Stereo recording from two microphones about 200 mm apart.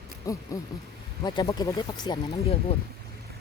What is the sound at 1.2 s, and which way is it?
Speech, 20° left (ahead or behind).